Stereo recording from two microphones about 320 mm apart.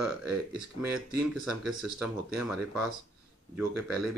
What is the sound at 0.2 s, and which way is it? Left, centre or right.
Speech, centre.